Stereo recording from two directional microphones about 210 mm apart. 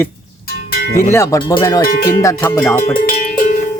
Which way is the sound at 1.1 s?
15° left (ahead or behind).